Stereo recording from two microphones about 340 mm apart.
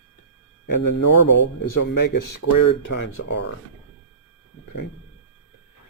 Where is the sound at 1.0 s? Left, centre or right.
Left.